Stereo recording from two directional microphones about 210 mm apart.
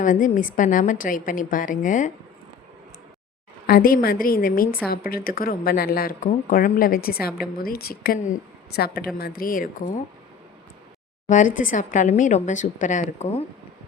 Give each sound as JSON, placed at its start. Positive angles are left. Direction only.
{"t": 0.0, "sound": "a woman's voice", "side_deg": 40}
{"t": 3.7, "sound": "a woman's voice", "side_deg": 45}
{"t": 11.3, "sound": "a woman's voice", "side_deg": 35}